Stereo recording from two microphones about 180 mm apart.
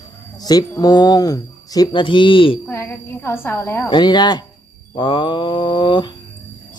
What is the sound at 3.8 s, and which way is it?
Speech, 25° left (ahead or behind).